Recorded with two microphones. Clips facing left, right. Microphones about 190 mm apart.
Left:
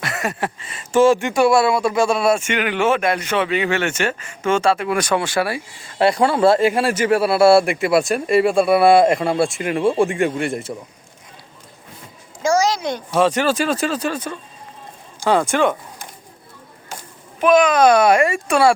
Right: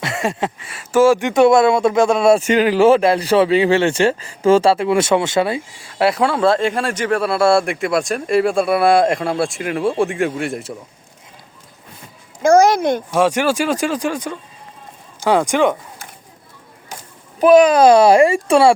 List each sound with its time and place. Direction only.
0.0 s a sound: 25° right (ahead or behind)
0.6 s speech: 10° right (ahead or behind)
1.3 s speech: 20° right (ahead or behind)
2.3 s speech: 35° right (ahead or behind)
5.8 s speech: 5° right (ahead or behind)
12.4 s speech: 55° right (ahead or behind)
13.1 s speech: 10° right (ahead or behind)
17.4 s speech: 35° right (ahead or behind)